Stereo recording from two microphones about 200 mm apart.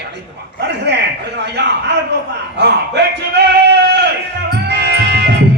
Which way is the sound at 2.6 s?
55° right (ahead or behind).